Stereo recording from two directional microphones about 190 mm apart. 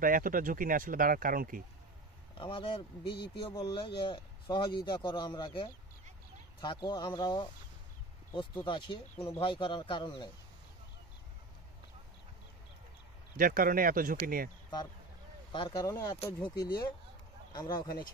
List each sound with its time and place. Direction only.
0.0 s speech: 45° right (ahead or behind)
2.3 s speech: 25° left (ahead or behind)
8.6 s speech: 25° left (ahead or behind)
13.4 s speech: 50° right (ahead or behind)
15.5 s speech: 25° left (ahead or behind)